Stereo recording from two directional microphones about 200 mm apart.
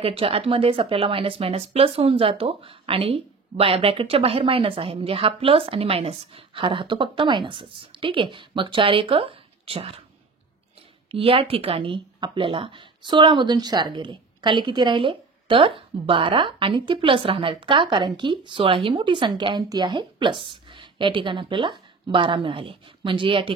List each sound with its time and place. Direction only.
0.0 s speech: 30° right (ahead or behind)
11.1 s speech: 30° right (ahead or behind)